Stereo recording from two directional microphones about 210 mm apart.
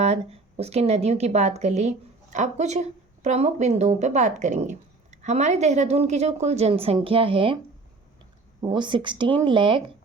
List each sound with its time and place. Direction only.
0.0 s speech: 30° right (ahead or behind)
8.6 s speech: 20° right (ahead or behind)